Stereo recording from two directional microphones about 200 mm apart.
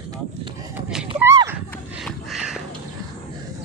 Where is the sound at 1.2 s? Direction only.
15° right (ahead or behind).